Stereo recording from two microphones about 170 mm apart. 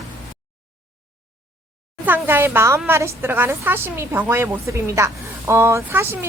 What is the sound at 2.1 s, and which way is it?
A woman's voice, 15° right (ahead or behind).